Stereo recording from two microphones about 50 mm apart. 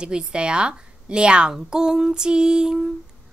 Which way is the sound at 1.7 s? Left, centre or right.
Centre.